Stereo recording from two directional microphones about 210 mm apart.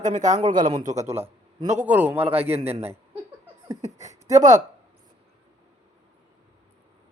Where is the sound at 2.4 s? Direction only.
30° right (ahead or behind).